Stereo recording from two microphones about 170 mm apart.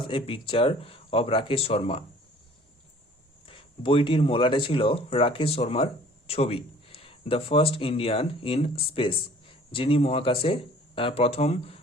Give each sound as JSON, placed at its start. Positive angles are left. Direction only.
{"t": 0.1, "sound": "speech", "side_deg": 30}
{"t": 3.4, "sound": "speech", "side_deg": 30}